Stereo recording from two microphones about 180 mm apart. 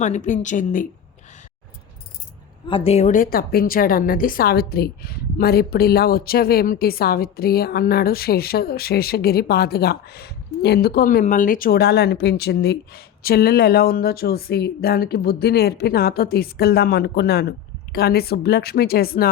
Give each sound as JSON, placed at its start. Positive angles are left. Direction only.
{"t": 0.0, "sound": "speech", "side_deg": 45}
{"t": 2.6, "sound": "a woman's voice", "side_deg": 30}